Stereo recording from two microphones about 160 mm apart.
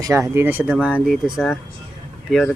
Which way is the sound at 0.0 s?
20° right (ahead or behind).